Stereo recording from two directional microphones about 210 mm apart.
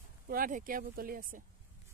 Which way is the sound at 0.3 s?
40° right (ahead or behind).